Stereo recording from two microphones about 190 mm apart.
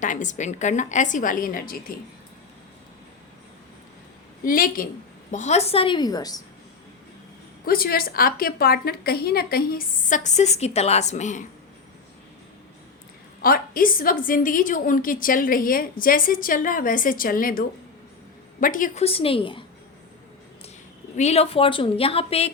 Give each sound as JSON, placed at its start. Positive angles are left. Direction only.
{"t": 0.0, "sound": "a woman's voice", "side_deg": 40}
{"t": 4.4, "sound": "a woman's voice", "side_deg": 45}
{"t": 7.6, "sound": "a woman's voice", "side_deg": 50}
{"t": 13.4, "sound": "a woman's voice", "side_deg": 50}
{"t": 19.0, "sound": "a woman's voice", "side_deg": 30}
{"t": 21.2, "sound": "a woman's voice", "side_deg": 35}